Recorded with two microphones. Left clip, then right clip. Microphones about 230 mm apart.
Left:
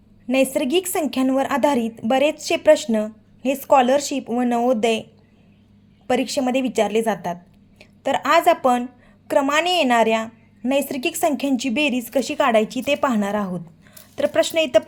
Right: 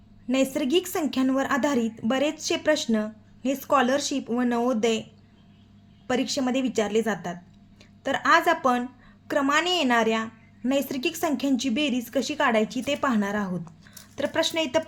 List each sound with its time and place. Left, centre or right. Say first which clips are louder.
0.3 s a woman's voice: left 5 dB; centre
6.1 s a woman's voice: left 5 dB; centre